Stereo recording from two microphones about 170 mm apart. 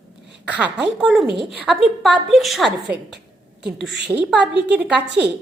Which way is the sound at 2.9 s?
70° right (ahead or behind).